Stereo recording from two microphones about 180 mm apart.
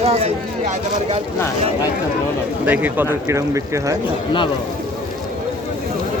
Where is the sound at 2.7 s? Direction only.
10° right (ahead or behind).